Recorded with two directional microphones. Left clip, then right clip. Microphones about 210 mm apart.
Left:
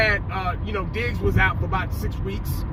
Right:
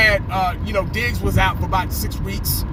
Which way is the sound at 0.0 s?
20° right (ahead or behind).